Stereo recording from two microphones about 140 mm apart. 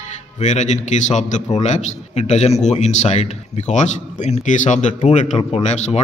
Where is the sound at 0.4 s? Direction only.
55° left (ahead or behind).